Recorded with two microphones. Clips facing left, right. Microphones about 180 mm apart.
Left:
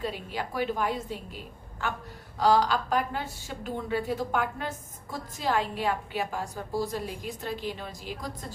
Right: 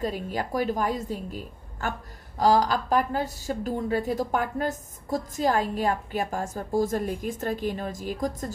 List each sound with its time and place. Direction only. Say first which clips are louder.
0.0 s a woman's voice: right 4 dB; 45° right (ahead or behind)